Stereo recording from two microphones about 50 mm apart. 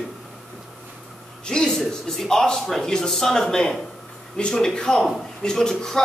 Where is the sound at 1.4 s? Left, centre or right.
Centre.